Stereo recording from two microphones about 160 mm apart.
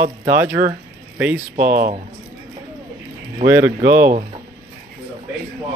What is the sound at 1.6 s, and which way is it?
Speech, 60° right (ahead or behind).